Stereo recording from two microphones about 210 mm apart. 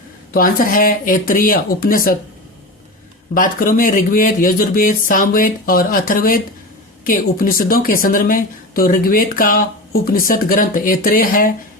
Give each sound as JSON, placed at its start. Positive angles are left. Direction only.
{"t": 0.3, "sound": "a woman's voice", "side_deg": 40}
{"t": 3.3, "sound": "a woman's voice", "side_deg": 40}